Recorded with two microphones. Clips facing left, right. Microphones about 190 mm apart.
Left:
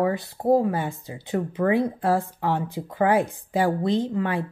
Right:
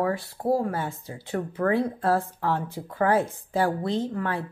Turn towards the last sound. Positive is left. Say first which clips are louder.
# left 3 dB
turn(degrees=15)  # may be behind; listen again after turning